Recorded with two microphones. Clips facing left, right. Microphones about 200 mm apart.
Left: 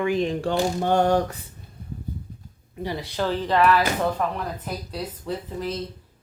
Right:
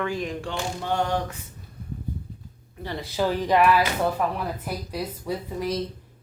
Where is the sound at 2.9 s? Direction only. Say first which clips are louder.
Right 2 dB; 5° right (ahead or behind).